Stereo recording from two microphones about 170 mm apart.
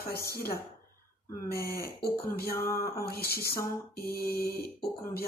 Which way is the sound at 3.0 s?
65° left (ahead or behind).